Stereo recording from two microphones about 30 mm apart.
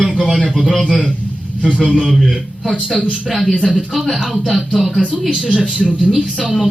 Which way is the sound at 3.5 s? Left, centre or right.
Right.